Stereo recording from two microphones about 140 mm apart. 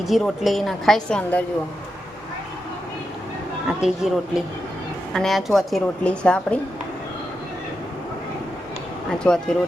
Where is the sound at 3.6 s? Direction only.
5° right (ahead or behind).